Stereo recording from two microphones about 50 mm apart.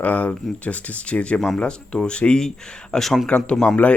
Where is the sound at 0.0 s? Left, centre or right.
Left.